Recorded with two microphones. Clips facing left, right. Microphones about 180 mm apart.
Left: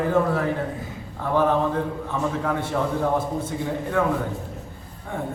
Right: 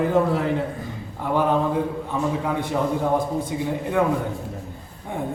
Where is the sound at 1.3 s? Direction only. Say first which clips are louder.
Even; 15° right (ahead or behind).